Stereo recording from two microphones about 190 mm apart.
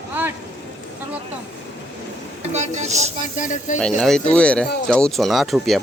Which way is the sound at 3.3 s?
40° left (ahead or behind).